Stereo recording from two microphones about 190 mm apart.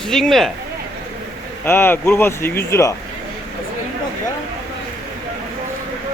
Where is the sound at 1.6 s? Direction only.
10° left (ahead or behind).